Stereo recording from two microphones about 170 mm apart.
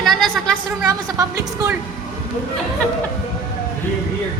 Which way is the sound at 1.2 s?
20° right (ahead or behind).